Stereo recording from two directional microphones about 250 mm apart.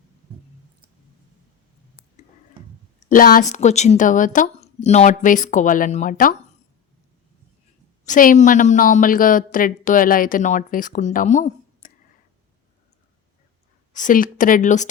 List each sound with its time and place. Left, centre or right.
3.1 s a woman's voice: left
8.0 s a woman's voice: left
13.9 s a woman's voice: left